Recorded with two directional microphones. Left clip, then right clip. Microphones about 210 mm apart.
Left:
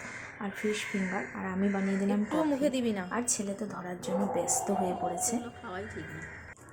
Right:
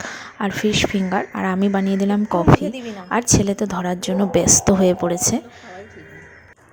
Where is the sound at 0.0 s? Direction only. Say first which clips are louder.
Right 13 dB; 35° right (ahead or behind).